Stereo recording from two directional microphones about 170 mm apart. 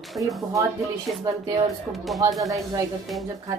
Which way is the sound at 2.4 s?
20° right (ahead or behind).